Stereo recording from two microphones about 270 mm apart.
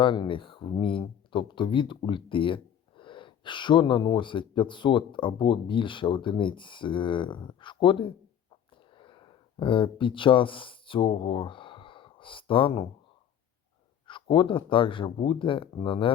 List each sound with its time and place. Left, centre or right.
0.0 s speech: centre
14.1 s speech: centre